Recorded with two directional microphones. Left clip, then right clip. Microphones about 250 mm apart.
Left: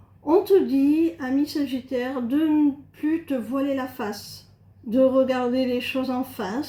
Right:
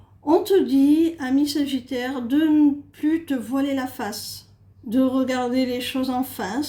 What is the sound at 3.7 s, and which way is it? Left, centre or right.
Speech, right.